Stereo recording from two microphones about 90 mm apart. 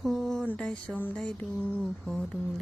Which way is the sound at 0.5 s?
10° left (ahead or behind).